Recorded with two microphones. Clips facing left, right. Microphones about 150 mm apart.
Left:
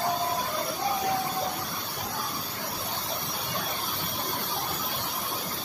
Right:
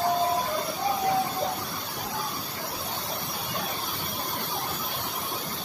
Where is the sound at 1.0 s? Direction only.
Centre (ahead or behind).